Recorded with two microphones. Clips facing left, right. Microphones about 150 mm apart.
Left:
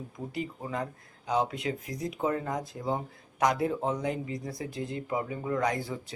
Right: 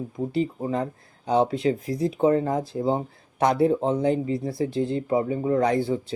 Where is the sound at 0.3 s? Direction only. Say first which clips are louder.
Right 9 dB; 30° right (ahead or behind).